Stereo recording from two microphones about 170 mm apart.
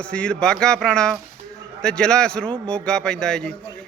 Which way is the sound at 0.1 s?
5° left (ahead or behind).